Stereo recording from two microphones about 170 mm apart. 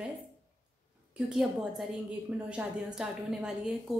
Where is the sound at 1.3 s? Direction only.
Centre (ahead or behind).